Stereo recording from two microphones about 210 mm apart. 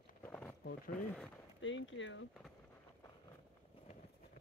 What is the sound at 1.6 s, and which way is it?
Speech, 65° left (ahead or behind).